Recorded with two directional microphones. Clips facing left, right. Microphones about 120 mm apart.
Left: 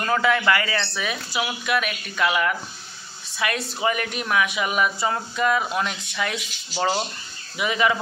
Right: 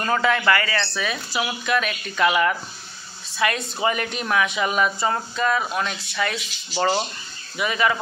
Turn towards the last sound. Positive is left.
turn(degrees=15)  # may be behind; listen again after turning